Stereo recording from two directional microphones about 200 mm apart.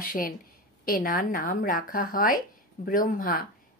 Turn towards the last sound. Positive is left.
turn(degrees=45)  # may be behind; listen again after turning